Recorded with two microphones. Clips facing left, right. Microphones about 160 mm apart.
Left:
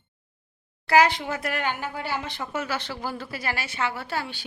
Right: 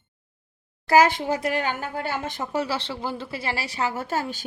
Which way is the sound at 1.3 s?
30° right (ahead or behind).